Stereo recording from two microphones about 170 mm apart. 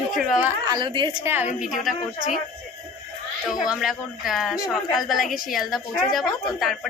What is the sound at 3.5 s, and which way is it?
Speech, 5° right (ahead or behind).